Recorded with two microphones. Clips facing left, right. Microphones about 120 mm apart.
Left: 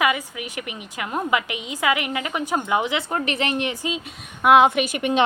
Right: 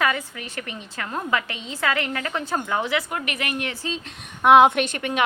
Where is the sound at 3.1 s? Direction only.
30° left (ahead or behind); by 4.0 s 15° left (ahead or behind).